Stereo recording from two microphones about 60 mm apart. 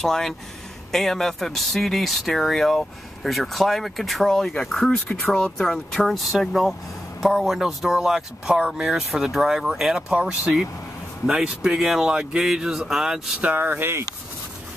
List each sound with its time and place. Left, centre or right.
0.0 s speech: centre
10.0 s speech: centre
11.2 s speech: centre
13.4 s speech: right